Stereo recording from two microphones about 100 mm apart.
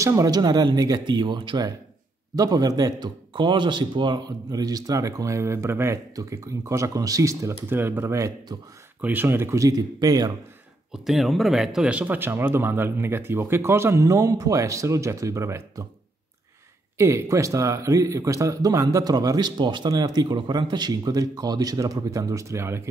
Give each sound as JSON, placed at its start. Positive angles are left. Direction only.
{"t": 0.0, "sound": "speech", "side_deg": -35}
{"t": 2.3, "sound": "speech", "side_deg": -40}
{"t": 3.3, "sound": "speech", "side_deg": -50}
{"t": 9.0, "sound": "speech", "side_deg": -20}
{"t": 10.9, "sound": "speech", "side_deg": 0}
{"t": 17.0, "sound": "speech", "side_deg": -30}